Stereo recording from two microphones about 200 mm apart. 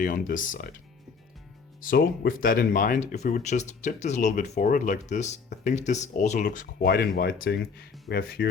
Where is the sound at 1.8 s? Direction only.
45° left (ahead or behind).